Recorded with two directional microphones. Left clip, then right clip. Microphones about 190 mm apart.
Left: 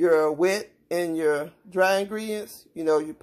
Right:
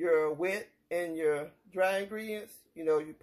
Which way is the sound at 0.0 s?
20° left (ahead or behind).